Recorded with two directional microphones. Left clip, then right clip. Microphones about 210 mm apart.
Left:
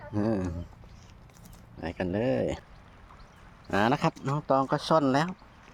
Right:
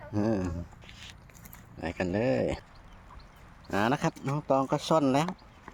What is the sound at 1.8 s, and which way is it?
Speech, centre (ahead or behind).